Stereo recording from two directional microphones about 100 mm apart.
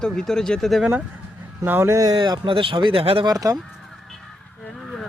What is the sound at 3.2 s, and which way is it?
Speech, 35° right (ahead or behind).